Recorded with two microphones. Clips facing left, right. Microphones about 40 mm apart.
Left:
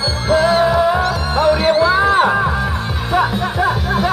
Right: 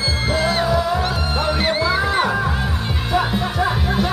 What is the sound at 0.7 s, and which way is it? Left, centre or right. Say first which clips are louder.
Music: left 5 dB; left.